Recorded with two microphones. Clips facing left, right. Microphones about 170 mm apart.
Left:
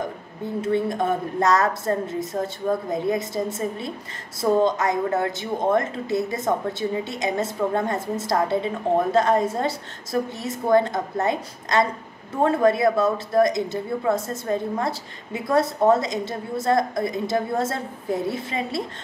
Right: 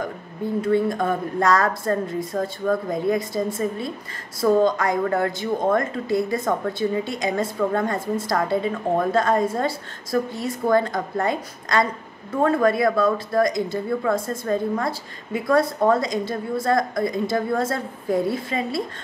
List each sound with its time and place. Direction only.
0.6 s a woman's voice: 20° left (ahead or behind)